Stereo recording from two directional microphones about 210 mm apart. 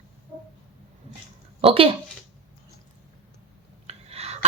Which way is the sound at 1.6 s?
25° right (ahead or behind).